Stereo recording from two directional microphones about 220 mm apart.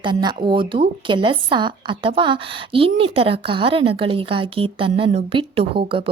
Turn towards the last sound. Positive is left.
turn(degrees=-25)  # may be behind; listen again after turning